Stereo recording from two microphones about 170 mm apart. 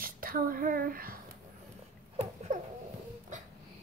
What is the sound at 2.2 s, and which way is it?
Rodents, 40° right (ahead or behind).